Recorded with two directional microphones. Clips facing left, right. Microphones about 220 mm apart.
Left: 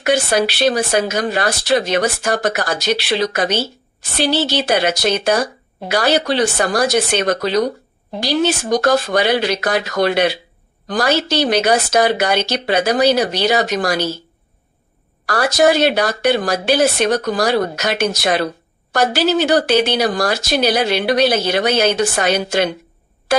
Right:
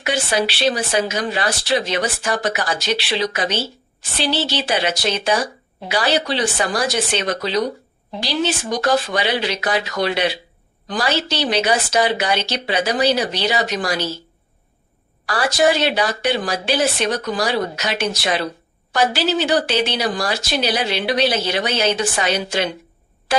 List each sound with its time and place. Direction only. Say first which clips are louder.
0.0 s speech: left 5 dB; 45° left (ahead or behind)
15.3 s speech: left 3 dB; 40° left (ahead or behind)